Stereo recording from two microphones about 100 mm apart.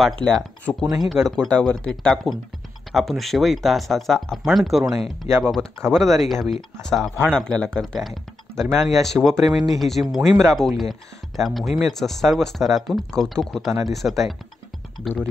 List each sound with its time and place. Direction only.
0.2 s speech: 5° left (ahead or behind)